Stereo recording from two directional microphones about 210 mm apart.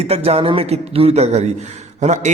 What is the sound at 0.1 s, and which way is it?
A man's voice, 30° right (ahead or behind).